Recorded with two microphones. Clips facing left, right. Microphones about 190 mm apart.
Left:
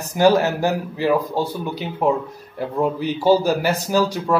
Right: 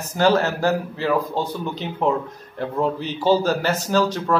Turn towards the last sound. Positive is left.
turn(degrees=10)  # may be behind; listen again after turning